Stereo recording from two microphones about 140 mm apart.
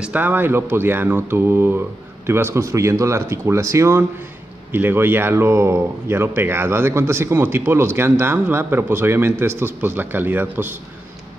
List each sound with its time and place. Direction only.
0.0 s speech: 10° right (ahead or behind)